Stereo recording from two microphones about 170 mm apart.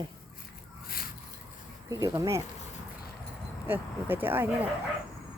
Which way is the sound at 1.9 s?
20° right (ahead or behind).